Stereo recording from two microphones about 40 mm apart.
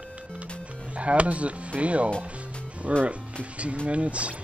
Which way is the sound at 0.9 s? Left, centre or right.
Right.